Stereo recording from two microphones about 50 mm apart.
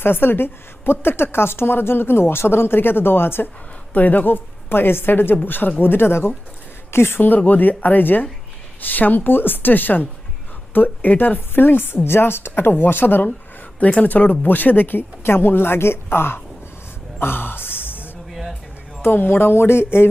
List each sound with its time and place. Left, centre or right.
0.0 s a woman's voice: left
3.9 s a woman's voice: left
7.2 s a woman's voice: left
13.7 s a woman's voice: left
17.2 s a sound: left
18.3 s a sound: centre
19.0 s a woman's voice: left